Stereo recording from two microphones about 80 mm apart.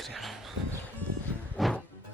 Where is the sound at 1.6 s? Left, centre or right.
Centre.